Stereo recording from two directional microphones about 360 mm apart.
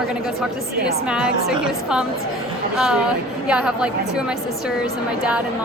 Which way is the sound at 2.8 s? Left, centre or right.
Centre.